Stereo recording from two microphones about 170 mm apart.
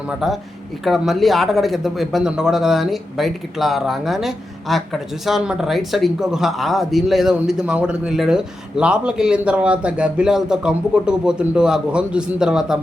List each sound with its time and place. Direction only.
0.9 s speech: centre (ahead or behind)